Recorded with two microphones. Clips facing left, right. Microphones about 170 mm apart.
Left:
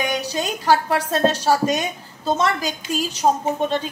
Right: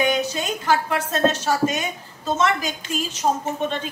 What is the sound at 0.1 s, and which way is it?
A woman's voice, 35° left (ahead or behind).